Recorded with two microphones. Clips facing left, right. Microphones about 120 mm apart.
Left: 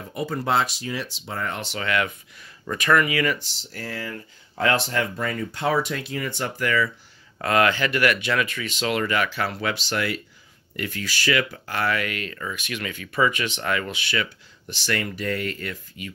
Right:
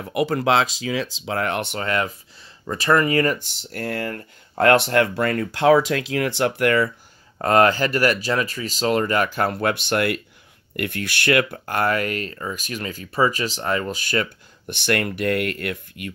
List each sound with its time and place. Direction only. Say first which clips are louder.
0.0 s speech: right 7 dB; 80° right; by 1.8 s 60° right (ahead or behind)
1.8 s speech: right 1 dB; 35° right (ahead or behind); by 6.9 s 60° right (ahead or behind)
7.3 s speech: right 4 dB; 40° right (ahead or behind); by 16.1 s 60° right (ahead or behind)